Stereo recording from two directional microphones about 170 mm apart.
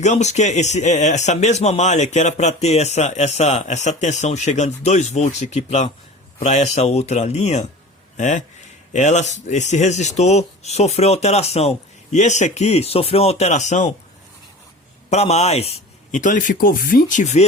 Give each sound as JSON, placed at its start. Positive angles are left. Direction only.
{"t": 0.0, "sound": "speech", "side_deg": 45}
{"t": 15.1, "sound": "speech", "side_deg": 40}